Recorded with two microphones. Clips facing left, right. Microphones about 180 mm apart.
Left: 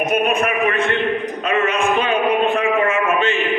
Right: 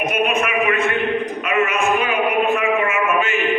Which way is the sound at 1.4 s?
30° left (ahead or behind).